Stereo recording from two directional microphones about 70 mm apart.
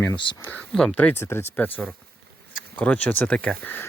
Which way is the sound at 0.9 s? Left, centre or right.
Left.